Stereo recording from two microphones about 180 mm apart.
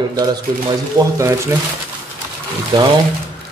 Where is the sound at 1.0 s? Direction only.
15° right (ahead or behind).